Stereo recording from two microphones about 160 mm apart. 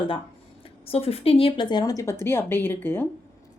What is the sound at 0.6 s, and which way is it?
A woman's voice, 40° left (ahead or behind).